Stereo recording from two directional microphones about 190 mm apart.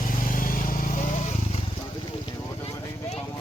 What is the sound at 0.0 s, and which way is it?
Vehicle, 45° left (ahead or behind).